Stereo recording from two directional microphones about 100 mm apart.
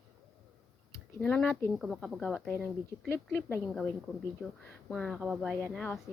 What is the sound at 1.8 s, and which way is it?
Speech, centre (ahead or behind).